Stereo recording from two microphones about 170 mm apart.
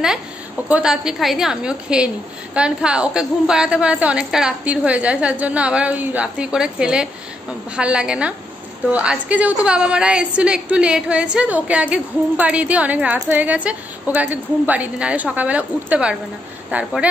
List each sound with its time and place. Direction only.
0.7 s a woman's voice: 5° right (ahead or behind)